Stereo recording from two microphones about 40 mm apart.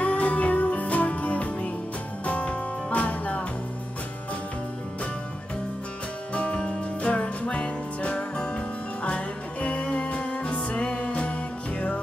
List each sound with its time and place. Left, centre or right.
0.0 s music: left
6.3 s music: left
8.2 s music: centre
8.5 s music: left